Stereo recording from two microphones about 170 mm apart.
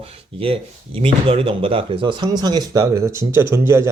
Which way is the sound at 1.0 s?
35° right (ahead or behind).